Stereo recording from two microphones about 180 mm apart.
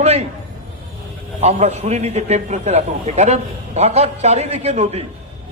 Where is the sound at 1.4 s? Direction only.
35° right (ahead or behind).